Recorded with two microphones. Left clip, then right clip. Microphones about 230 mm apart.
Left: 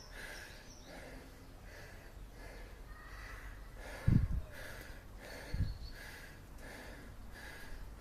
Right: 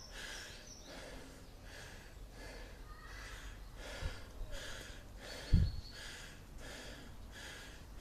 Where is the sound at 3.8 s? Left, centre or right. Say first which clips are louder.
Left 7 dB; centre.